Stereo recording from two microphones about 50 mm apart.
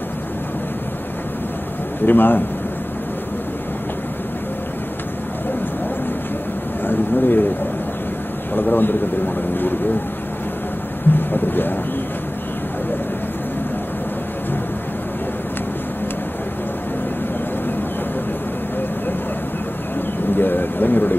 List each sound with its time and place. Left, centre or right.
2.0 s speech: left
6.9 s bird: left
8.5 s speech: left
11.1 s speech: left
20.3 s a sound: left